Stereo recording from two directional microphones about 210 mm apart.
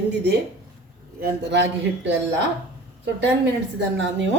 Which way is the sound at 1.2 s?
55° right (ahead or behind).